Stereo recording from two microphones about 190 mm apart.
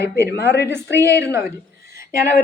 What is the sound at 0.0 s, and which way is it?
Speech, 60° left (ahead or behind).